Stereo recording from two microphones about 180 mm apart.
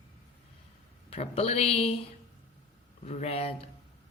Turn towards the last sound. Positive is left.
turn(degrees=35)  # may be behind; listen again after turning